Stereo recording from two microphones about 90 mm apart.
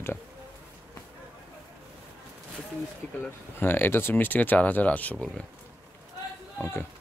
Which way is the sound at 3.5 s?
25° left (ahead or behind).